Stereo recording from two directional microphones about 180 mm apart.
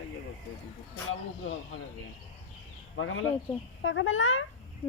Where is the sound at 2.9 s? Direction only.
90° left.